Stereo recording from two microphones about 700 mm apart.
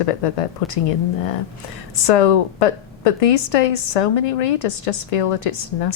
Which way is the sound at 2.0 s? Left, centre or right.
Left.